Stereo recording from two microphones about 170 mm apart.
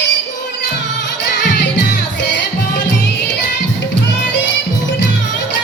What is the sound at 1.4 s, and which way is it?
Music, 90° left.